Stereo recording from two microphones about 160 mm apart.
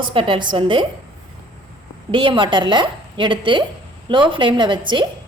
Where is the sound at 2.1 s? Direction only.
30° right (ahead or behind).